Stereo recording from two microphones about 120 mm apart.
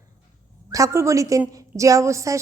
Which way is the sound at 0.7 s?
25° right (ahead or behind).